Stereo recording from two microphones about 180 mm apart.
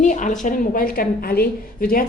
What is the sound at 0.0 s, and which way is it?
A woman's voice, 45° left (ahead or behind).